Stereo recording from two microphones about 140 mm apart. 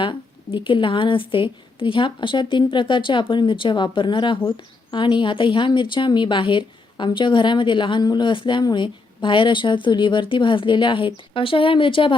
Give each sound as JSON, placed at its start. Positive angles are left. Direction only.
{"t": 0.0, "sound": "a woman's voice", "side_deg": 35}